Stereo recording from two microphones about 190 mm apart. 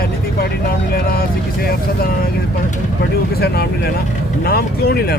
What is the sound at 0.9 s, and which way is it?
Speech, 50° left (ahead or behind).